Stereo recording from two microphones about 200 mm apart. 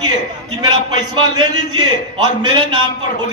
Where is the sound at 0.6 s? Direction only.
20° right (ahead or behind).